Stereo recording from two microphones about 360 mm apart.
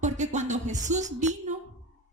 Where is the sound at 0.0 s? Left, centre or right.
Centre.